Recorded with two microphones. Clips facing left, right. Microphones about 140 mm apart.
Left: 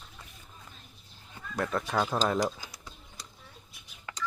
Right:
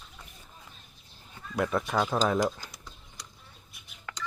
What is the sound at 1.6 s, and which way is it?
Speech, 5° right (ahead or behind).